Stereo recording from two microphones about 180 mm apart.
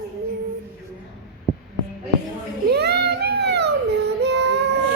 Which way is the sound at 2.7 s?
65° right (ahead or behind).